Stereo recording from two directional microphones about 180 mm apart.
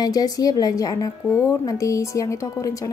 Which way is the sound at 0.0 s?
20° left (ahead or behind).